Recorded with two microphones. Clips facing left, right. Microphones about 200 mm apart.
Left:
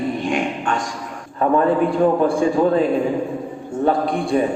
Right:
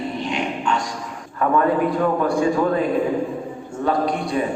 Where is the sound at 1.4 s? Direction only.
30° left (ahead or behind).